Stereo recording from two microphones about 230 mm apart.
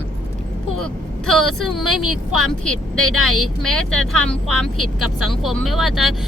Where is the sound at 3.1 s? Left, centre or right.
Right.